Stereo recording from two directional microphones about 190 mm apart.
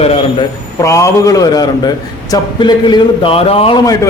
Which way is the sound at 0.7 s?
15° left (ahead or behind).